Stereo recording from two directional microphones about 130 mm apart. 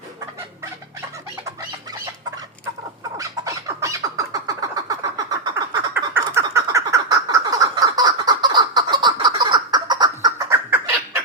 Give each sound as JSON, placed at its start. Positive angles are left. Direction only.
{"t": 3.2, "sound": "squawk", "side_deg": -25}
{"t": 5.9, "sound": "frog", "side_deg": -20}